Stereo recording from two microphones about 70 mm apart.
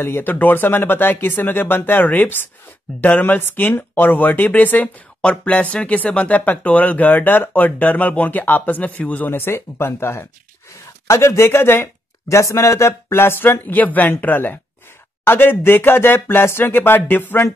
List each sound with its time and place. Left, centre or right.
0.0 s speech: left
12.3 s speech: left